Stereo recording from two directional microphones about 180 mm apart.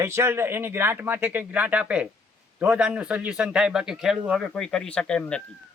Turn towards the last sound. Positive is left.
turn(degrees=5)  # may be behind; listen again after turning